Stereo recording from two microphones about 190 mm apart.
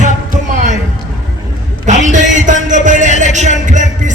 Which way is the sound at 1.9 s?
40° right (ahead or behind).